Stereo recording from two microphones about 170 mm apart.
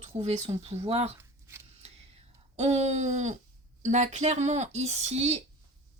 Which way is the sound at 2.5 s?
40° right (ahead or behind).